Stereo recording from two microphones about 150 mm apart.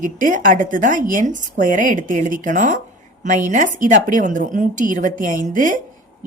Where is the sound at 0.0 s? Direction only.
60° right (ahead or behind).